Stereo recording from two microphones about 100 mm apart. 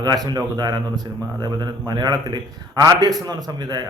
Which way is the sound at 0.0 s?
45° right (ahead or behind).